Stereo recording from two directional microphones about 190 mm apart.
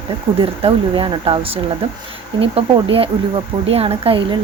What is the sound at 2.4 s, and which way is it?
Speech, 30° right (ahead or behind).